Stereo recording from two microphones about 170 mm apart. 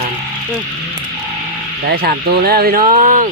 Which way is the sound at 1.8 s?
65° right (ahead or behind).